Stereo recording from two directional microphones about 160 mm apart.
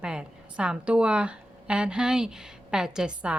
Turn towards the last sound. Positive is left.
turn(degrees=-5)  # may be behind; listen again after turning